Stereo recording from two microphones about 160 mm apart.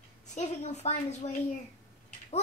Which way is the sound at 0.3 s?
45° left (ahead or behind).